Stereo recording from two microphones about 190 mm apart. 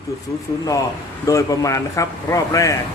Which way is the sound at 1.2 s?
15° left (ahead or behind).